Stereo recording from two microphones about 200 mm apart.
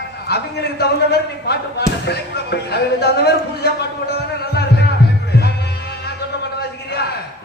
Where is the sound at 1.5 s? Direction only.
55° left (ahead or behind).